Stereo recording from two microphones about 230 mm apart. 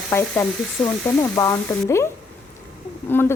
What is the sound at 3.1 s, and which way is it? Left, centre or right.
Speech, centre.